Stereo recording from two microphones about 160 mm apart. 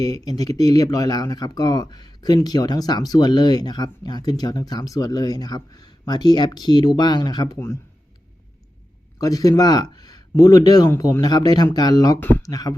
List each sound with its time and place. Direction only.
0.0 s speech: 25° left (ahead or behind)
9.1 s speech: 20° left (ahead or behind)
12.2 s speech: 10° left (ahead or behind)
12.5 s speech: 25° left (ahead or behind)